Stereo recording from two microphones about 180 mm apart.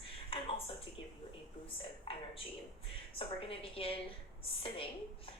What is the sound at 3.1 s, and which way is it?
Speech, 30° left (ahead or behind).